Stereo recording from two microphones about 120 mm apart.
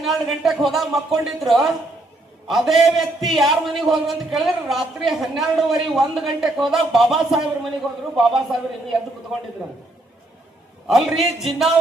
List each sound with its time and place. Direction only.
0.0 s a man's voice: centre (ahead or behind)
10.8 s a man's voice: centre (ahead or behind)